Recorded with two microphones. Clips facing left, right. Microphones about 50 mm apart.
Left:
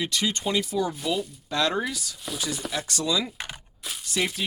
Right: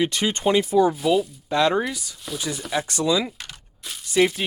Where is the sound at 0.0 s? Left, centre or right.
Right.